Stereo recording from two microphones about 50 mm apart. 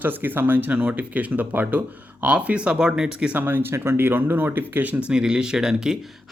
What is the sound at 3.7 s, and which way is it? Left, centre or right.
Speech, right.